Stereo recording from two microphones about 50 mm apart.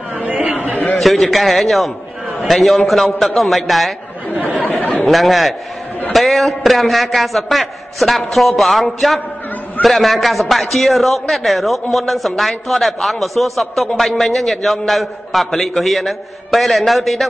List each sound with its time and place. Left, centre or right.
0.2 s chatter: right
0.9 s a man's voice: centre
4.6 s chatter: left
5.0 s a man's voice: centre